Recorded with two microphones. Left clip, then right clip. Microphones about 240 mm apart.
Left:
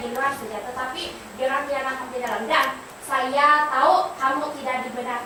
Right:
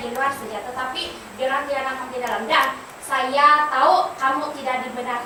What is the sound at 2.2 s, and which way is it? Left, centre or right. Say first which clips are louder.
A woman's voice: right 2 dB; centre.